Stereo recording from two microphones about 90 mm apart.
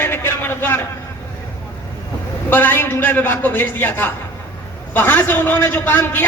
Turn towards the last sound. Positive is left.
turn(degrees=25)  # may be behind; listen again after turning